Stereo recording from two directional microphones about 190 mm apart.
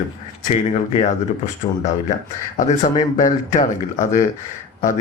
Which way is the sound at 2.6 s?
40° left (ahead or behind).